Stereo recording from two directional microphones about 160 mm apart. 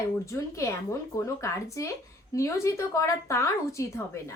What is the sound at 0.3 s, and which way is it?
Speech, 20° left (ahead or behind).